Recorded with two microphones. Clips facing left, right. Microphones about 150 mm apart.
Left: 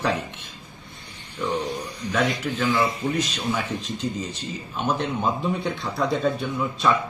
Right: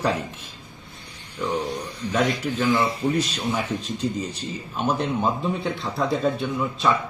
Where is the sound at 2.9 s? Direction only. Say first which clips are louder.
Right 2 dB; 35° right (ahead or behind).